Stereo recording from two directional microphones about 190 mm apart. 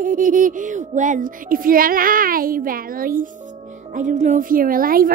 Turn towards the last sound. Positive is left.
turn(degrees=-50)  # may be behind; listen again after turning